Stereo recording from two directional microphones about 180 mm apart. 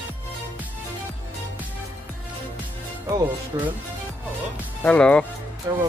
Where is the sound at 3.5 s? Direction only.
25° right (ahead or behind).